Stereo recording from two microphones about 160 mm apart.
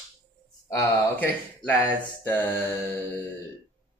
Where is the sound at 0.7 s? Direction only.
20° left (ahead or behind).